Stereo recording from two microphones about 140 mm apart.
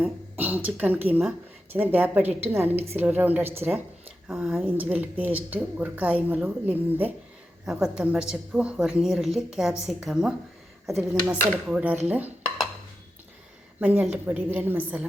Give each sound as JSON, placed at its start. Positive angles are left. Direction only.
{"t": 0.0, "sound": "a woman's voice", "side_deg": -15}
{"t": 4.4, "sound": "a woman's voice", "side_deg": 0}
{"t": 13.7, "sound": "a woman's voice", "side_deg": -10}